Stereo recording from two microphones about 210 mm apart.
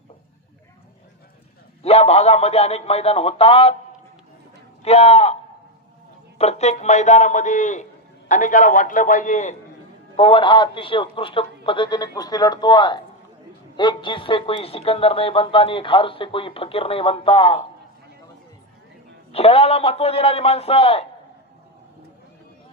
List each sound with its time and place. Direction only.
1.8 s speech: 30° left (ahead or behind)
4.8 s a man's voice: 30° left (ahead or behind)
6.4 s a man's voice: 30° left (ahead or behind)
19.3 s speech: 30° left (ahead or behind)